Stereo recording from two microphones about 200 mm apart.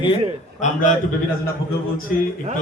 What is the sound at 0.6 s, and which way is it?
Speech, 40° left (ahead or behind).